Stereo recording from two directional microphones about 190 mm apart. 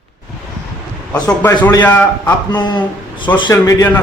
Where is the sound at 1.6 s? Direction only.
20° left (ahead or behind).